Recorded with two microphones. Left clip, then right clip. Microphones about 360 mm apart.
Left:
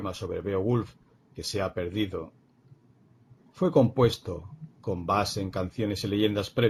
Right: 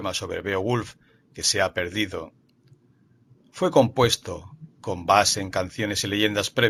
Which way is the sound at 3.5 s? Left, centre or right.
Right.